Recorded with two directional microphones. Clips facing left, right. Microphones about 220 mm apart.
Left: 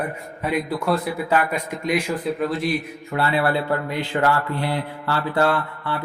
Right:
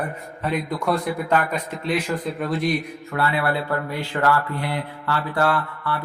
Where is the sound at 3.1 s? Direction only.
30° left (ahead or behind).